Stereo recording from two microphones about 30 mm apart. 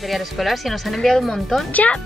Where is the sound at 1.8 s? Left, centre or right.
Left.